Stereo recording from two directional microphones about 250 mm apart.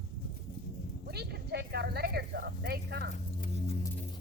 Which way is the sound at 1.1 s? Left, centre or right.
Right.